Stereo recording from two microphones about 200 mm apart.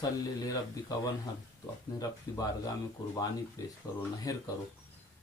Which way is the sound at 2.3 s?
15° left (ahead or behind).